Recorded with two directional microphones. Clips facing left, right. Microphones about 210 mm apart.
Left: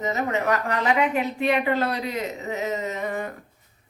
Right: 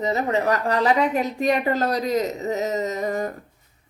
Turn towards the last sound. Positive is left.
turn(degrees=-40)  # may be behind; listen again after turning